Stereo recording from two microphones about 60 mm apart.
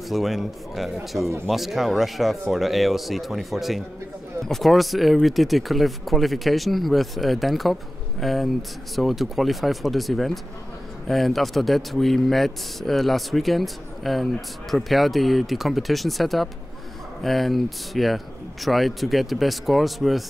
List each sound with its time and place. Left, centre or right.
0.1 s a man's voice: centre